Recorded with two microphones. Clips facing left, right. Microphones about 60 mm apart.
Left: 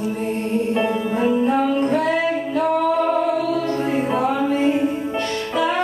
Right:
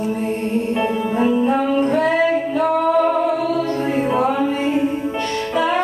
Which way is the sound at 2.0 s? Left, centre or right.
Right.